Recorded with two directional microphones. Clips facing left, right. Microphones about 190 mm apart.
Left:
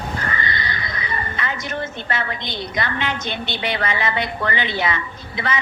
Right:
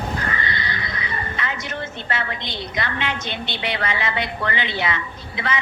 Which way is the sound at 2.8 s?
45° left (ahead or behind).